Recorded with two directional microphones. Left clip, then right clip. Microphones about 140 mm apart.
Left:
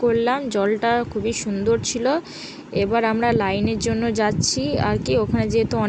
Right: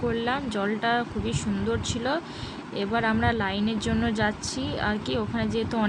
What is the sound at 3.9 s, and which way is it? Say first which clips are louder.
Speech: left 5 dB; 30° left (ahead or behind).